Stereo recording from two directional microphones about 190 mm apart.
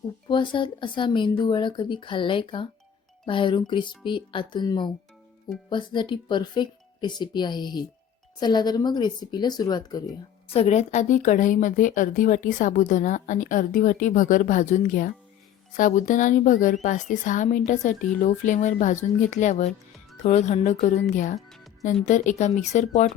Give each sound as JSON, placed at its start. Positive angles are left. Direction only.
{"t": 0.3, "sound": "speech", "side_deg": 25}
{"t": 10.5, "sound": "a woman's voice", "side_deg": 35}
{"t": 21.3, "sound": "music", "side_deg": 0}
{"t": 22.0, "sound": "speech", "side_deg": 40}